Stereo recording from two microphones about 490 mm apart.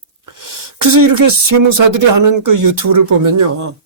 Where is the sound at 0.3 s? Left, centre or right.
Right.